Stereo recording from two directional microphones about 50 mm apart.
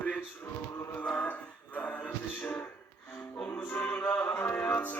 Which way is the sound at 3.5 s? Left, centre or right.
Left.